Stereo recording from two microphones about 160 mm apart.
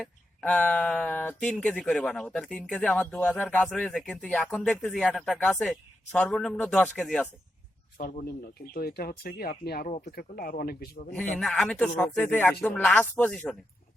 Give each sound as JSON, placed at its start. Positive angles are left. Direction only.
{"t": 0.0, "sound": "speech", "side_deg": 5}
{"t": 7.9, "sound": "speech", "side_deg": 65}
{"t": 11.1, "sound": "speech", "side_deg": 10}